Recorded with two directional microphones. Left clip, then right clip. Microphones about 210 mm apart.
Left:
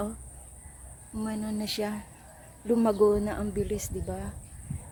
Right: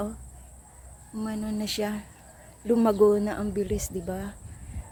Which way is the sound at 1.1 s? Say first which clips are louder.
Right 1 dB; 5° right (ahead or behind).